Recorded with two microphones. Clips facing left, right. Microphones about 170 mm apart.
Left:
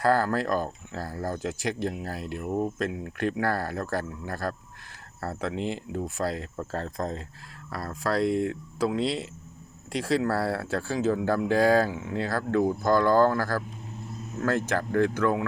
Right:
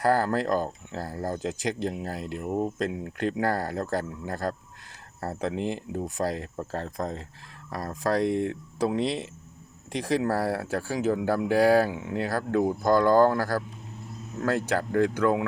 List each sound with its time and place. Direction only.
0.0 s speech: 15° right (ahead or behind)